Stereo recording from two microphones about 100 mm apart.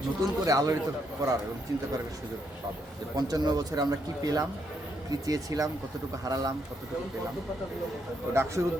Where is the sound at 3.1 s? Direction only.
40° right (ahead or behind).